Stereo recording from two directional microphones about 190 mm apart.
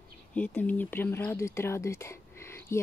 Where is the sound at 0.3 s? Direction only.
10° left (ahead or behind).